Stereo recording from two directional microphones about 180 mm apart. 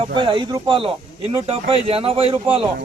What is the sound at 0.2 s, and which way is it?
Speech, 30° right (ahead or behind).